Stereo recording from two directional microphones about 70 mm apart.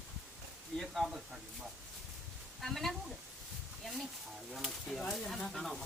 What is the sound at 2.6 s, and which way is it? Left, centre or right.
Speech, centre.